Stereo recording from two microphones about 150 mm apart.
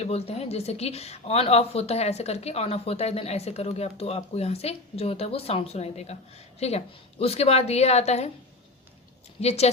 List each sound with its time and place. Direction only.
0.0 s a woman's voice: 45° left (ahead or behind)
9.4 s a woman's voice: 45° left (ahead or behind)